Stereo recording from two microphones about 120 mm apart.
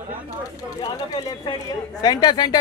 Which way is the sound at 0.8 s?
35° left (ahead or behind).